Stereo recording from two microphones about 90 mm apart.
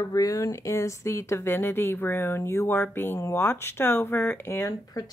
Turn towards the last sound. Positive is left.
turn(degrees=30)  # may be behind; listen again after turning